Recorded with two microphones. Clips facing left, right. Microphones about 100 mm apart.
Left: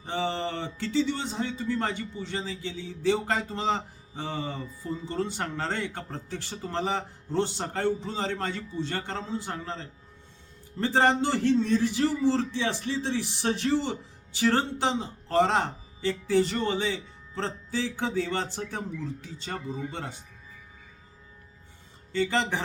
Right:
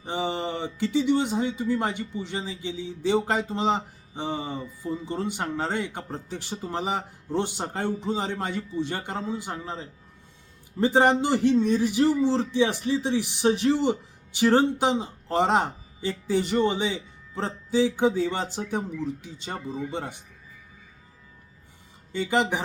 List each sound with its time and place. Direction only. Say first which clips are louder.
0.0 s speech: right 1 dB; 15° right (ahead or behind)
22.1 s speech: right 2 dB; 15° right (ahead or behind)